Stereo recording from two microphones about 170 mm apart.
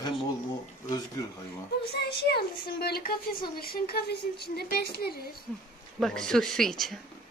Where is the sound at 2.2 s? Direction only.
70° left (ahead or behind).